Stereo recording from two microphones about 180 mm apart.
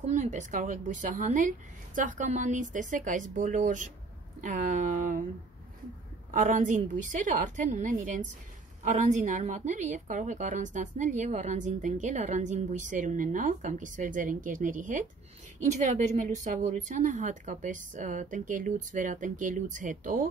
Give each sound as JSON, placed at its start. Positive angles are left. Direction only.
{"t": 0.0, "sound": "a woman's voice", "side_deg": -40}
{"t": 6.3, "sound": "a woman's voice", "side_deg": -45}